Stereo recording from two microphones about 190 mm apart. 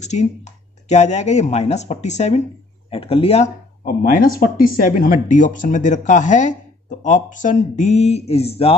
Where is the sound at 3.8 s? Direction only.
50° left (ahead or behind).